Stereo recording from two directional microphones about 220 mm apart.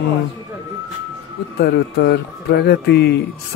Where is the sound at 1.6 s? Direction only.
50° left (ahead or behind).